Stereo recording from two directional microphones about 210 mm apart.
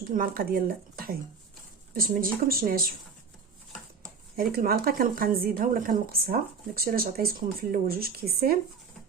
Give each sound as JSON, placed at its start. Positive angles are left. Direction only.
{"t": 0.1, "sound": "speech", "side_deg": -45}
{"t": 1.9, "sound": "speech", "side_deg": -45}
{"t": 4.4, "sound": "speech", "side_deg": -45}